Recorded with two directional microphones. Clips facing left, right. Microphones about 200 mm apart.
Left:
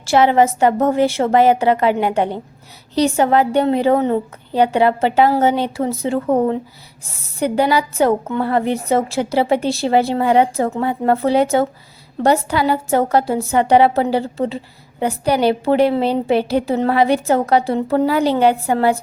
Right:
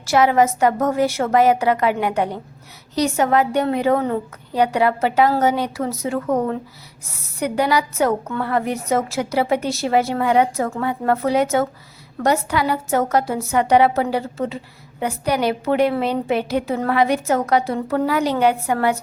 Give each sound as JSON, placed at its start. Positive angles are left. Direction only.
{"t": 0.0, "sound": "a woman's voice", "side_deg": 30}